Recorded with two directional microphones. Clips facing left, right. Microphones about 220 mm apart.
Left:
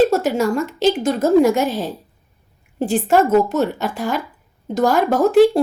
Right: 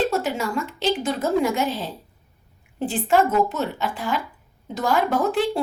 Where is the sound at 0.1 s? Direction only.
45° left (ahead or behind).